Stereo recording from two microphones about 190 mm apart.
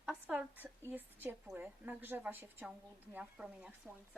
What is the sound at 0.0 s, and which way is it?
A woman's voice, centre (ahead or behind).